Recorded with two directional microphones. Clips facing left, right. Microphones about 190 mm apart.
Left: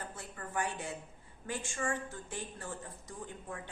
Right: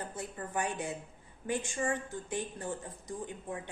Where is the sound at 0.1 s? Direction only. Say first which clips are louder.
Right 3 dB; 20° right (ahead or behind).